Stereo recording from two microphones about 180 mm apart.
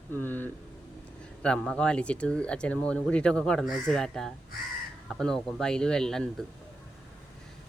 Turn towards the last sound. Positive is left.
turn(degrees=5)  # may be behind; listen again after turning